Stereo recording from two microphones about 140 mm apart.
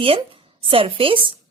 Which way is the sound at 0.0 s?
40° right (ahead or behind).